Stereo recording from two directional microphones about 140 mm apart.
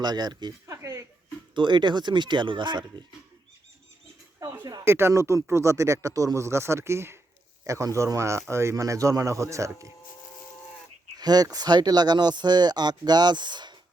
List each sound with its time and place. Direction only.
0.0 s speech: 30° right (ahead or behind)
0.8 s a sound: 20° right (ahead or behind)
1.5 s speech: 35° right (ahead or behind)
4.4 s a sound: 20° right (ahead or behind)
4.6 s speech: 25° right (ahead or behind)
11.2 s speech: 30° right (ahead or behind)